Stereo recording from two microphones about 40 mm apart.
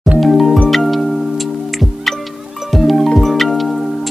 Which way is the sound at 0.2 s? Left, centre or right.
Centre.